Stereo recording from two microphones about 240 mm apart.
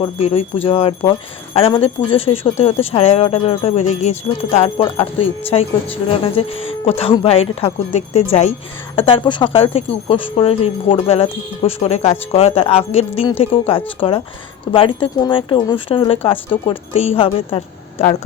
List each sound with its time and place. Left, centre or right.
0.0 s speech: left